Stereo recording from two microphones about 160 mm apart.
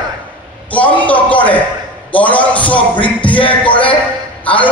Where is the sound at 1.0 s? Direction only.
10° left (ahead or behind).